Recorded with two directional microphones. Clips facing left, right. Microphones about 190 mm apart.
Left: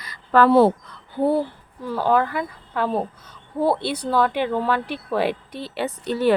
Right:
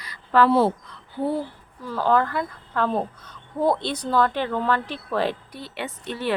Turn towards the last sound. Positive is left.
turn(degrees=40)  # may be behind; listen again after turning